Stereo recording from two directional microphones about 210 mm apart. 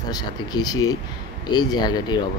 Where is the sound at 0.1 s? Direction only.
20° left (ahead or behind).